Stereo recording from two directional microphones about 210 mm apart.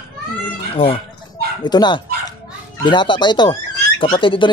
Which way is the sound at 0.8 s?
25° left (ahead or behind).